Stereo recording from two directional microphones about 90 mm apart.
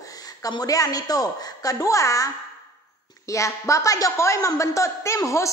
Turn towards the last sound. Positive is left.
turn(degrees=35)  # may be behind; listen again after turning